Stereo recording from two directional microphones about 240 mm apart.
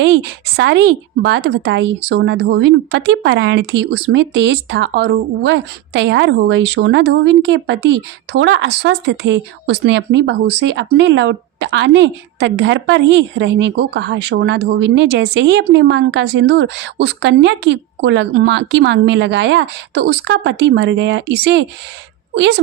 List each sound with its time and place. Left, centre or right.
0.0 s a woman's voice: right